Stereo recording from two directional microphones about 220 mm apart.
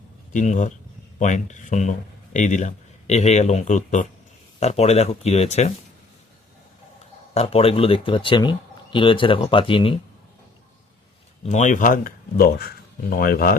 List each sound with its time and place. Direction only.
0.3 s speech: 35° left (ahead or behind)
7.3 s speech: 25° left (ahead or behind)
11.4 s speech: 35° left (ahead or behind)